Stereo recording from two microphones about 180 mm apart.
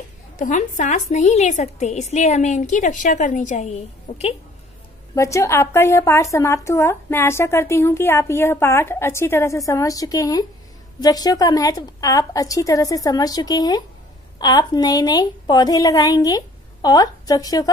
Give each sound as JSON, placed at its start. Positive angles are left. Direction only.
{"t": 0.4, "sound": "a woman's voice", "side_deg": 45}
{"t": 5.1, "sound": "a woman's voice", "side_deg": 15}